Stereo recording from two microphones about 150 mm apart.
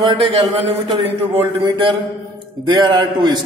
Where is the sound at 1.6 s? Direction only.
30° right (ahead or behind).